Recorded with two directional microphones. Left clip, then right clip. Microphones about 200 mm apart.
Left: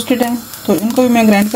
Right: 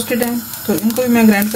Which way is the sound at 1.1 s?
35° left (ahead or behind).